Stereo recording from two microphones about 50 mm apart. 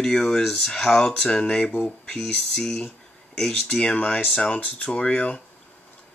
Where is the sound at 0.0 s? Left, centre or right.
Centre.